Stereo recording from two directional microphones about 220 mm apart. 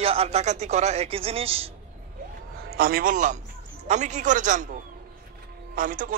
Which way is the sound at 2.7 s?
40° right (ahead or behind).